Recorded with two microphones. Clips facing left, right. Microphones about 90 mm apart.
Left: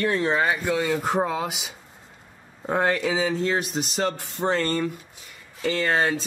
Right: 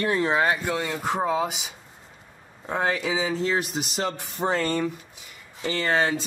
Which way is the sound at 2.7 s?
5° right (ahead or behind).